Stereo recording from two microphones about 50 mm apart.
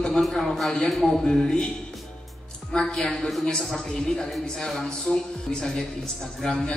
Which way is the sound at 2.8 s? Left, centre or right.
Centre.